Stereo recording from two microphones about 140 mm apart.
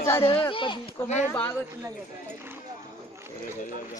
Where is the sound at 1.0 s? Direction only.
55° left (ahead or behind).